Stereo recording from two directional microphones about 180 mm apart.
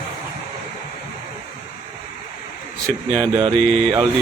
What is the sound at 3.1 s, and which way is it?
Mantra, 20° right (ahead or behind).